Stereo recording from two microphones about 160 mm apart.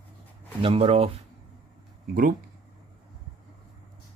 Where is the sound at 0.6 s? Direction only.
35° right (ahead or behind).